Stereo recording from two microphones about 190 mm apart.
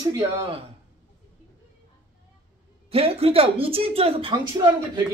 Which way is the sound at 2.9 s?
30° right (ahead or behind).